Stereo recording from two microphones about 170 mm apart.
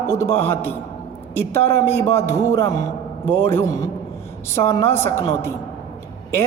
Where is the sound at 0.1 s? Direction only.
15° left (ahead or behind).